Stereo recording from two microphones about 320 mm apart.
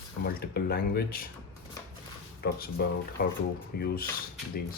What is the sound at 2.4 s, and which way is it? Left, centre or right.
Speech, left.